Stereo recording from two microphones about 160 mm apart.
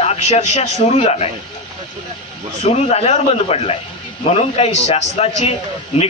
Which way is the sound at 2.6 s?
40° left (ahead or behind).